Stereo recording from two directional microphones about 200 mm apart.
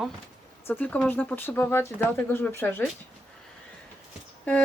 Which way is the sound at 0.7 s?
5° left (ahead or behind).